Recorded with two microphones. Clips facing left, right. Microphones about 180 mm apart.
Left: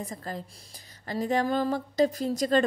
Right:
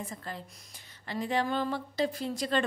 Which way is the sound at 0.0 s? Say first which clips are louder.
Left 4 dB; 40° left (ahead or behind).